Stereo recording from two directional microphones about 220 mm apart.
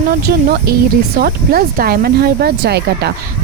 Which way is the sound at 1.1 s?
40° right (ahead or behind).